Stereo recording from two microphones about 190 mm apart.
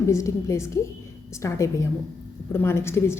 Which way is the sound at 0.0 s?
15° left (ahead or behind).